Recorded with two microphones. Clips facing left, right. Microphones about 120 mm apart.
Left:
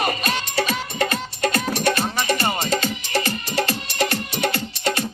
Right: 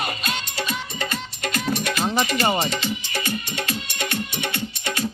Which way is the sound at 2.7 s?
40° left (ahead or behind).